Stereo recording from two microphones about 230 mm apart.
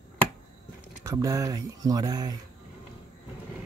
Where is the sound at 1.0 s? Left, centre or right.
Centre.